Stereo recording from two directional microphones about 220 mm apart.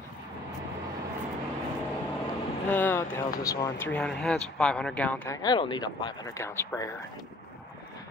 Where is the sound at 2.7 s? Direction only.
10° left (ahead or behind).